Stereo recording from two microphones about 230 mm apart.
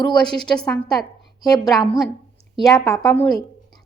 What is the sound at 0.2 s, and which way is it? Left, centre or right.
Speech, centre.